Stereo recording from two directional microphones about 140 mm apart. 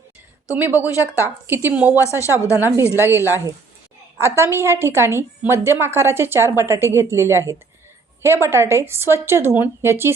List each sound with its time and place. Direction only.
0.5 s a woman's voice: 15° right (ahead or behind)
0.9 s a woman's voice: 20° left (ahead or behind)
1.5 s a woman's voice: 15° right (ahead or behind)
2.0 s a woman's voice: 20° left (ahead or behind)
2.5 s a woman's voice: 15° right (ahead or behind)